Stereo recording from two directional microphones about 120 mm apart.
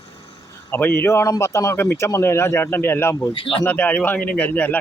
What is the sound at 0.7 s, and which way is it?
Speech, 15° left (ahead or behind).